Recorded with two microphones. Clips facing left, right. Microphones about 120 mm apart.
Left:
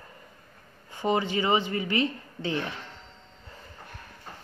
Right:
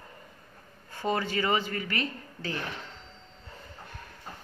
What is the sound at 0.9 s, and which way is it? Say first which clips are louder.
Speech: left 3 dB; 15° left (ahead or behind).